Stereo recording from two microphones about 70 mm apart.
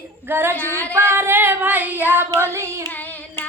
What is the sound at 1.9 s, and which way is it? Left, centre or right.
Child singing, right.